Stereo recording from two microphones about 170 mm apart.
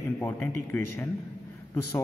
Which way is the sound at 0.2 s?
10° left (ahead or behind).